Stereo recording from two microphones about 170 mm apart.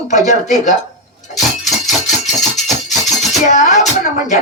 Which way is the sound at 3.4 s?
45° left (ahead or behind).